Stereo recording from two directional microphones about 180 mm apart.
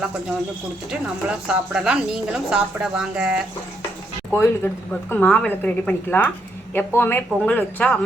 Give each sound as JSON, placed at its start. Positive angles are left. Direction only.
{"t": 0.9, "sound": "a woman's voice", "side_deg": -5}
{"t": 4.3, "sound": "a woman's voice", "side_deg": 15}